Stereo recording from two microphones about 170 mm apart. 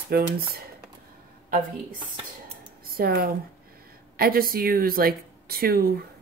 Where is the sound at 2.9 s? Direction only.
60° right (ahead or behind).